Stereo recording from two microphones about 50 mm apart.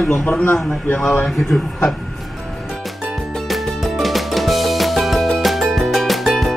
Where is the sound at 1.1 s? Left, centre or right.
Left.